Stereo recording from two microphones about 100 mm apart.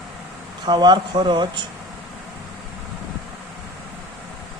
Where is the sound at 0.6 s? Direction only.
45° right (ahead or behind).